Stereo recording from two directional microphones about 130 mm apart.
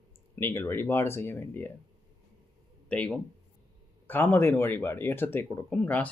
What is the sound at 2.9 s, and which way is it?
Speech, 10° left (ahead or behind).